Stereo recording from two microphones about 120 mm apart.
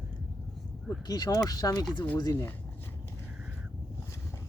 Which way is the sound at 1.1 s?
30° left (ahead or behind).